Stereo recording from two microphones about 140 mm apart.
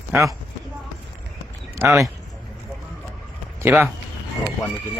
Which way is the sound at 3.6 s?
15° right (ahead or behind).